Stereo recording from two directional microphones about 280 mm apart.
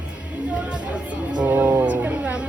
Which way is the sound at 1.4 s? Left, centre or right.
Centre.